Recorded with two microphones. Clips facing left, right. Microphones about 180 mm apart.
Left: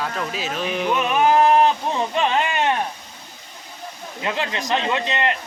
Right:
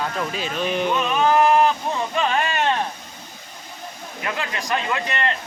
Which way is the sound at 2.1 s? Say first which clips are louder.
Even; 20° left (ahead or behind).